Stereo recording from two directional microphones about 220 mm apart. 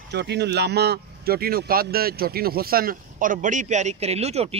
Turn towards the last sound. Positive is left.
turn(degrees=-30)  # may be behind; listen again after turning